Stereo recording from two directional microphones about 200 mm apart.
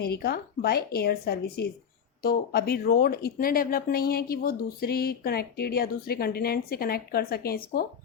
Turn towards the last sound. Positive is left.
turn(degrees=50)  # may be behind; listen again after turning